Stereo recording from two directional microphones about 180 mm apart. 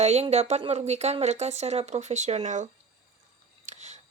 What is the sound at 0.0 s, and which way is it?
Speech, 35° right (ahead or behind).